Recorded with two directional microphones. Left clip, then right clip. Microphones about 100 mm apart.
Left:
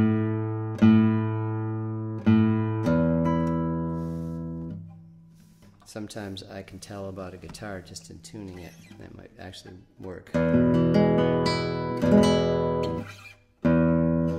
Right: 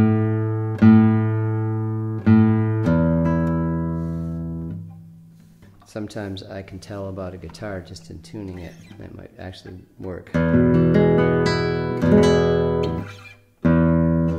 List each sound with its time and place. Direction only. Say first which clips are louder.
0.0 s music: right 5 dB; 35° left (ahead or behind)
4.3 s music: right 4 dB; 40° left (ahead or behind)
5.9 s speech: right 6 dB; 5° left (ahead or behind)
10.3 s music: right 4 dB; 35° left (ahead or behind)